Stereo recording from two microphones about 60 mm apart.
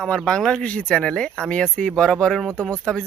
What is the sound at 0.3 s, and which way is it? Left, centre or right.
Speech, centre.